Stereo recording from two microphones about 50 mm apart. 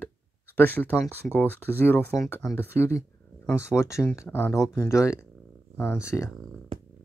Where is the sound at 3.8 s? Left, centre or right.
Left.